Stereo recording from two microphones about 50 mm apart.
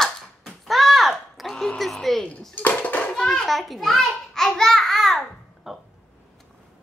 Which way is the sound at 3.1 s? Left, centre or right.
Centre.